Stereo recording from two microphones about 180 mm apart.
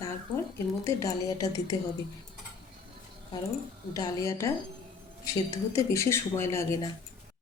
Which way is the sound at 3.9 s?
20° left (ahead or behind).